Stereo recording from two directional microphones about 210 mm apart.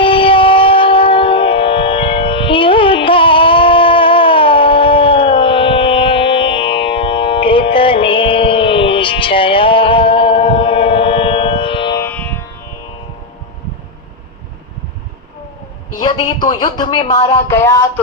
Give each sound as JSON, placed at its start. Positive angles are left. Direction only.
{"t": 0.0, "sound": "music", "side_deg": 25}
{"t": 12.0, "sound": "siren", "side_deg": 10}
{"t": 16.0, "sound": "a sound", "side_deg": 20}